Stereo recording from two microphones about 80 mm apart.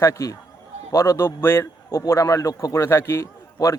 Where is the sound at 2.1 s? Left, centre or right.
Left.